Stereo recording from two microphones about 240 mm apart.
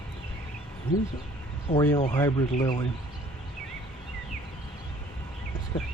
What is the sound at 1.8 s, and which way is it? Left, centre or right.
Speech, centre.